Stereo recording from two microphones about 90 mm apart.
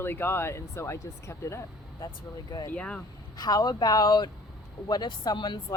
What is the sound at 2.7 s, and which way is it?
Speech, 10° left (ahead or behind).